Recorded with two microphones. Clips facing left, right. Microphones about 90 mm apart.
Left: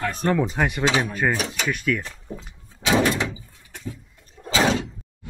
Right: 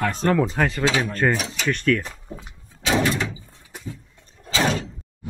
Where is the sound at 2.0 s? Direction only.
5° right (ahead or behind).